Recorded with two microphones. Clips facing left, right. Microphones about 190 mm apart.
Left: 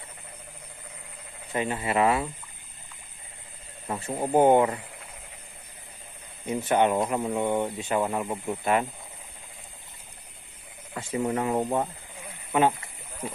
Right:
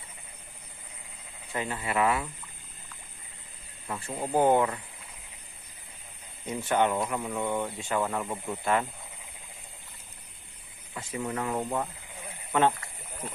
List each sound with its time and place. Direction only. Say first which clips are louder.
1.5 s speech: left 4 dB; 20° left (ahead or behind)
3.8 s speech: left 4 dB; 25° left (ahead or behind)
6.4 s speech: left 3 dB; 15° left (ahead or behind)
7.0 s speech: left 5 dB; 30° left (ahead or behind)
11.0 s speech: left 5 dB; 30° left (ahead or behind)
12.5 s a sound: left 2 dB; 10° left (ahead or behind)